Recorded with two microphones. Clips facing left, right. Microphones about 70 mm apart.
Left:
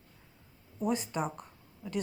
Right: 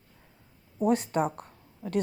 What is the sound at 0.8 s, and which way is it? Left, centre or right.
Speech, right.